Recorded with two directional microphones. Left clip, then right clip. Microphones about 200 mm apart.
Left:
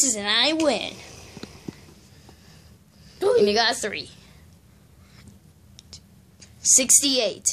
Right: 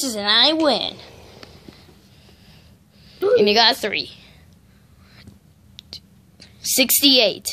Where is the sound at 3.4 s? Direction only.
15° right (ahead or behind).